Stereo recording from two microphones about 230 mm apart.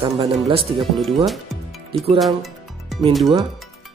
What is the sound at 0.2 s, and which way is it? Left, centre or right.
Speech, right.